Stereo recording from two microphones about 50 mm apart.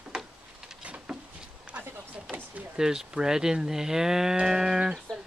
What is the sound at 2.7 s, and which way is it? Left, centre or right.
Moo, centre.